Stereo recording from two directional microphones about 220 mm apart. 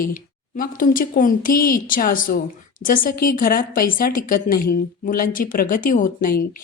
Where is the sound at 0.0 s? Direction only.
40° left (ahead or behind).